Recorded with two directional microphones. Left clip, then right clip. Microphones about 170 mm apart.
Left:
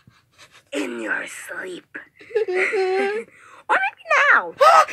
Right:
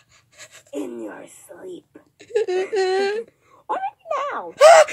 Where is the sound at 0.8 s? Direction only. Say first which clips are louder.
Left 4 dB; 55° left (ahead or behind).